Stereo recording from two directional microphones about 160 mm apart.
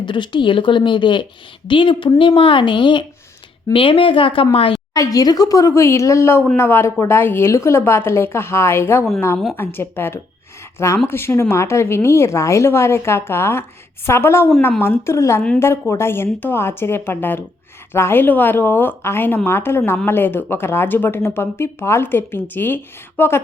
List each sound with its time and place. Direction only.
0.0 s a woman's voice: 30° left (ahead or behind)
4.9 s speech: 20° left (ahead or behind)